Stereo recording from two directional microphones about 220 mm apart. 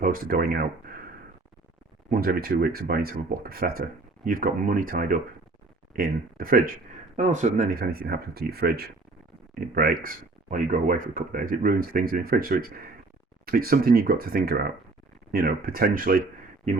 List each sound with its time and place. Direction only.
0.0 s speech: 40° right (ahead or behind)
2.0 s speech: 40° right (ahead or behind)